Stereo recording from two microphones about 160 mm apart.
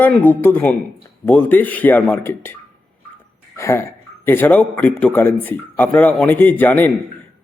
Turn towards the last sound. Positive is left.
turn(degrees=10)  # may be behind; listen again after turning